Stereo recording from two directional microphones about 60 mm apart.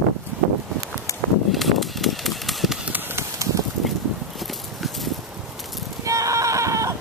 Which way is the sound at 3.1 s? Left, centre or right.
Right.